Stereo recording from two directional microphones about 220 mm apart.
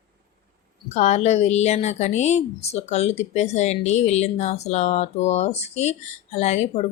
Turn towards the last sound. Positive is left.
turn(degrees=30)  # may be behind; listen again after turning